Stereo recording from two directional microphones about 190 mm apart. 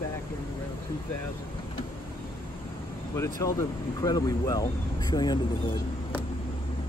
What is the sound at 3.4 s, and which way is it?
Speech, 15° left (ahead or behind).